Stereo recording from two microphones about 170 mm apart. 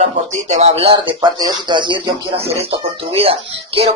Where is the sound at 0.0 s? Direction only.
45° right (ahead or behind).